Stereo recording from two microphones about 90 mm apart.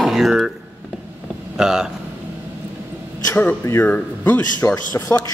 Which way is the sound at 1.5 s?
5° right (ahead or behind).